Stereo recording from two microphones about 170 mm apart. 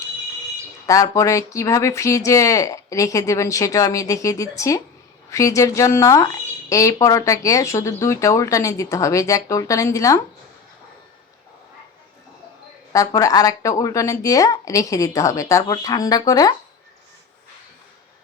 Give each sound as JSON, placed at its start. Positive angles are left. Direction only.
{"t": 0.9, "sound": "speech", "side_deg": 20}
{"t": 12.9, "sound": "speech", "side_deg": 20}